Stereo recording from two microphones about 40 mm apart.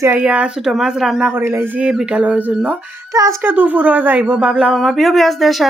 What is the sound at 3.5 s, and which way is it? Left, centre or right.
Speech, right.